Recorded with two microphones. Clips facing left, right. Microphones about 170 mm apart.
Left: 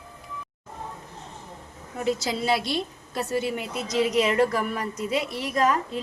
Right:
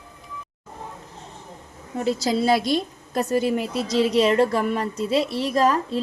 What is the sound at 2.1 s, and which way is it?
A woman's voice, 35° right (ahead or behind).